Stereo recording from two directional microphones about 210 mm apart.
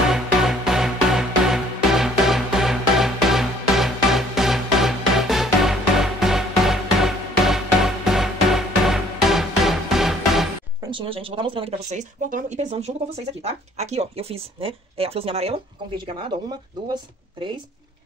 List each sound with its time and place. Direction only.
0.1 s music: centre (ahead or behind)
10.9 s speech: 25° right (ahead or behind)